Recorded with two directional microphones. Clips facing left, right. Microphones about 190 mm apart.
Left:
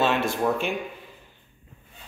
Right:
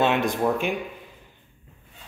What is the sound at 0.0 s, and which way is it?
Speech, 15° right (ahead or behind).